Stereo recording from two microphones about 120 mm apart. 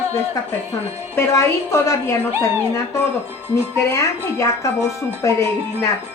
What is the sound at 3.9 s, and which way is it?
Speech, 25° left (ahead or behind).